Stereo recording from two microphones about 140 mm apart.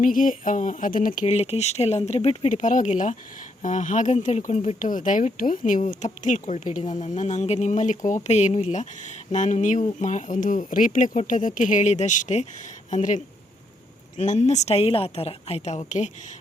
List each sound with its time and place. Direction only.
0.0 s speech: 75° left (ahead or behind)
1.3 s speech: 50° left (ahead or behind)